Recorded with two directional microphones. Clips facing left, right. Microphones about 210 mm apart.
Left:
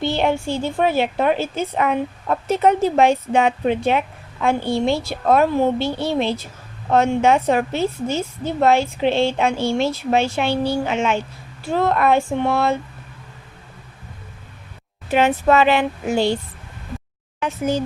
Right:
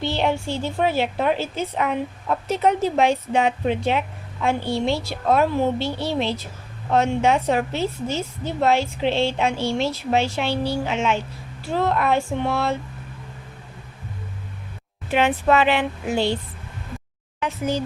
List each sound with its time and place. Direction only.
0.0 s a woman's voice: 50° left (ahead or behind)
15.1 s a woman's voice: 40° left (ahead or behind)
17.4 s a woman's voice: 45° left (ahead or behind)